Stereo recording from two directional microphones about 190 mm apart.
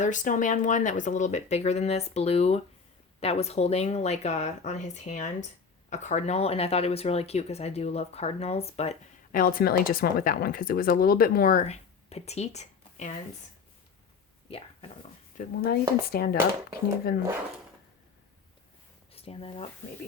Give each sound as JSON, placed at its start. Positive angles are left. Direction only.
{"t": 0.0, "sound": "speech", "side_deg": 40}
{"t": 9.3, "sound": "speech", "side_deg": 50}
{"t": 15.4, "sound": "speech", "side_deg": 60}
{"t": 19.1, "sound": "speech", "side_deg": 30}